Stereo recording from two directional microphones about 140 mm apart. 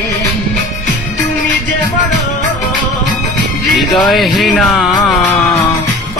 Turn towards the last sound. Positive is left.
turn(degrees=0)  # may be behind; listen again after turning